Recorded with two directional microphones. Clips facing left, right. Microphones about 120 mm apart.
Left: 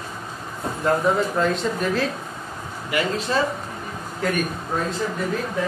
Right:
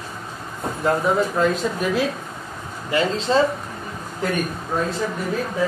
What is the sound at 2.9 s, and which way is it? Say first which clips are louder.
Speech: right 3 dB; 25° right (ahead or behind).